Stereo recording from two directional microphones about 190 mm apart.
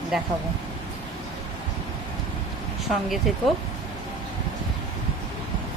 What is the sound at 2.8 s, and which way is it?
Speech, centre (ahead or behind).